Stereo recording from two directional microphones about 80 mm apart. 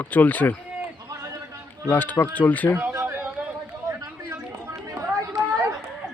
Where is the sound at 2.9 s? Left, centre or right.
Right.